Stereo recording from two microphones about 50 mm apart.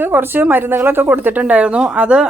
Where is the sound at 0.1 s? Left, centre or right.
Right.